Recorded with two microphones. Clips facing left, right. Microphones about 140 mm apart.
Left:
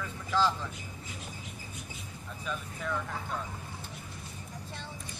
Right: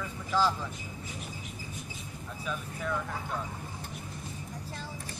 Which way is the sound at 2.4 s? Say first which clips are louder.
Right 1 dB; 5° right (ahead or behind).